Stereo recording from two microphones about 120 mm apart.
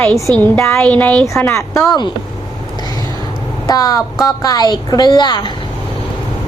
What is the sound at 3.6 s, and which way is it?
A woman's voice, 30° left (ahead or behind).